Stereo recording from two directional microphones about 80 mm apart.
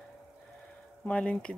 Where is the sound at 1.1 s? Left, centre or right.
Centre.